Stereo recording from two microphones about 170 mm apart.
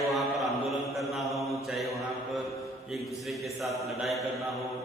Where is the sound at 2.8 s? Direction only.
Centre (ahead or behind).